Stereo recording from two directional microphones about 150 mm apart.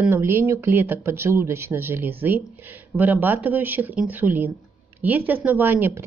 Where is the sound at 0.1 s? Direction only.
15° right (ahead or behind).